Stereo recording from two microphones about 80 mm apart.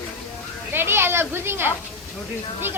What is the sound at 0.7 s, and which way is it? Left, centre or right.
Speech, right.